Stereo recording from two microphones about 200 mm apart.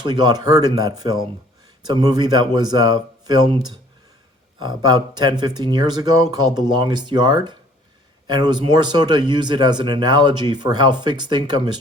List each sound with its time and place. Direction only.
0.0 s speech: 20° right (ahead or behind)
4.6 s speech: 20° right (ahead or behind)